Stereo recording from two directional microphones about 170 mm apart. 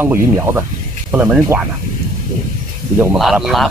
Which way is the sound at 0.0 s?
15° right (ahead or behind).